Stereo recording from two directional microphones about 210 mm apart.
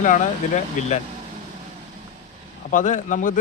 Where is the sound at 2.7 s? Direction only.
35° left (ahead or behind).